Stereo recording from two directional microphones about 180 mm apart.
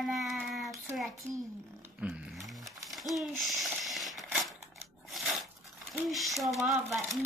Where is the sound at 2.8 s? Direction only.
Centre (ahead or behind).